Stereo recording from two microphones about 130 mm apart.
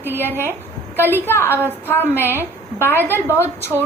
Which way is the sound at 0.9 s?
15° left (ahead or behind).